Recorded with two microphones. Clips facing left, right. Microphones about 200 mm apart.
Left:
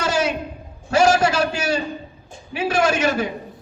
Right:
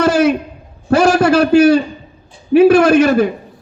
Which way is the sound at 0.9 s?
60° right (ahead or behind).